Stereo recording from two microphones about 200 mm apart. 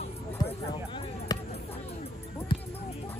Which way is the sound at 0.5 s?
25° left (ahead or behind).